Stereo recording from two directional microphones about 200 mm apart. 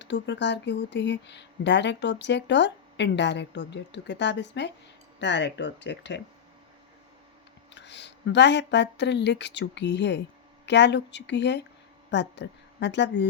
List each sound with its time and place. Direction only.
0.0 s speech: 60° left (ahead or behind)
7.7 s speech: 60° left (ahead or behind)